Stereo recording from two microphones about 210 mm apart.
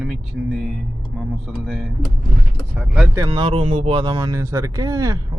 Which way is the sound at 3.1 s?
20° right (ahead or behind).